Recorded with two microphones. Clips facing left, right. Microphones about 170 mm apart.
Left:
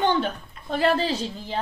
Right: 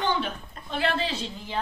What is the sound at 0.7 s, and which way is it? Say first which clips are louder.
Speech: left 5 dB; 40° left (ahead or behind).